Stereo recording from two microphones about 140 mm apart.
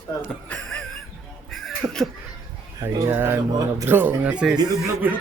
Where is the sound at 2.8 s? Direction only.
15° right (ahead or behind).